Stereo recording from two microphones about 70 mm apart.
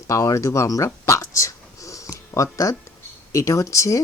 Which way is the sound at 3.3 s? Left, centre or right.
Left.